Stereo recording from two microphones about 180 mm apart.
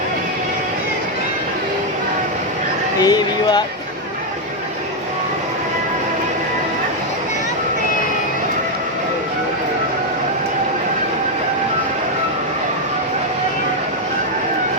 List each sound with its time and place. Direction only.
3.0 s speech: 25° left (ahead or behind)